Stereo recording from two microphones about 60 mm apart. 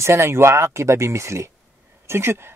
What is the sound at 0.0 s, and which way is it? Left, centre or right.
Speech, right.